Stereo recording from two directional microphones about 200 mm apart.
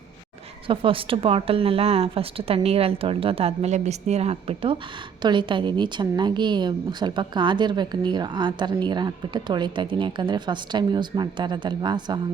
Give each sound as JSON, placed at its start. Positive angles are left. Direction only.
{"t": 0.7, "sound": "a woman's voice", "side_deg": -25}